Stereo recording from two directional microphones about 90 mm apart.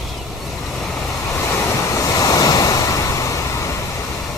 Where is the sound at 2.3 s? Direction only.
40° left (ahead or behind).